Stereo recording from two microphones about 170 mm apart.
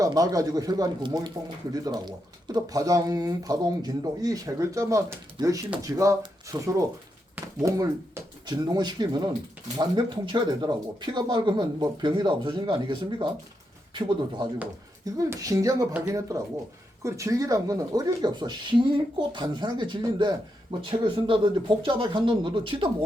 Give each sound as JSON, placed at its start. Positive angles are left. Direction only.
{"t": 0.0, "sound": "speech", "side_deg": -20}